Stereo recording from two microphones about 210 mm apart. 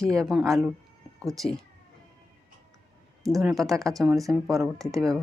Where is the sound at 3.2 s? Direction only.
Centre (ahead or behind).